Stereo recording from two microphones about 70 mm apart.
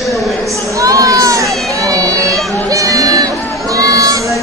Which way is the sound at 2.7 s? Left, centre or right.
Right.